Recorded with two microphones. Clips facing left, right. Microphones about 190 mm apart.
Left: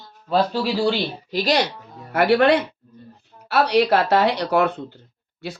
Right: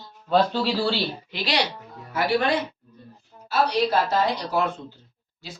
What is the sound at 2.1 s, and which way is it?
A woman's voice, 65° left (ahead or behind).